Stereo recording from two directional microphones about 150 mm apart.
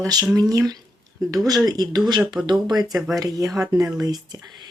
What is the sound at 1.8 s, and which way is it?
Speech, 25° right (ahead or behind).